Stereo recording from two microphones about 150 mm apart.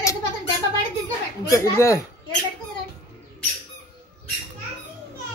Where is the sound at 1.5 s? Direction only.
20° left (ahead or behind).